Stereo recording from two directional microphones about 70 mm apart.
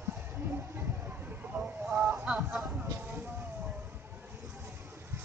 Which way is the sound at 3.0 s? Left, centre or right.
Right.